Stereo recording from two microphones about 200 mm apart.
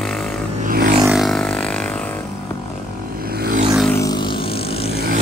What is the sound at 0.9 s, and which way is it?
Music, 5° right (ahead or behind).